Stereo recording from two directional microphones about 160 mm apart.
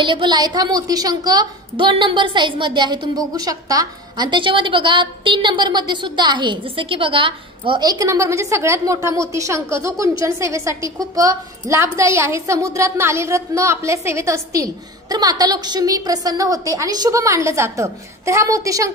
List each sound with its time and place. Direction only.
0.0 s a woman's voice: 30° right (ahead or behind)